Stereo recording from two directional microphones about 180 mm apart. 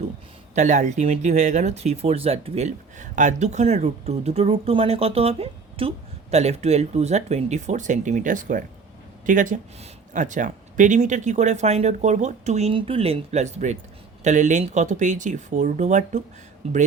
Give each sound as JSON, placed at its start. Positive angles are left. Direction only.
{"t": 0.5, "sound": "speech", "side_deg": -45}